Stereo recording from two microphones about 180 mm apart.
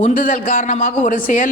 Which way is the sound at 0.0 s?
50° left (ahead or behind).